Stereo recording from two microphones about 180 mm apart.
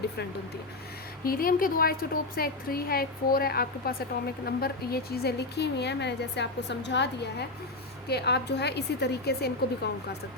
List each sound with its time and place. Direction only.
1.2 s a woman's voice: 55° left (ahead or behind)